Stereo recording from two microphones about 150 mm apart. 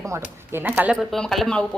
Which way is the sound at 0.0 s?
15° right (ahead or behind).